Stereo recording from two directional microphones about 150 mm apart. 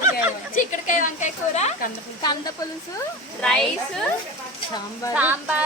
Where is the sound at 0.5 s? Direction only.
60° left (ahead or behind).